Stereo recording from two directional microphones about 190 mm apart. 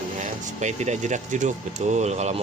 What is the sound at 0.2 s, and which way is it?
Speech, 40° right (ahead or behind).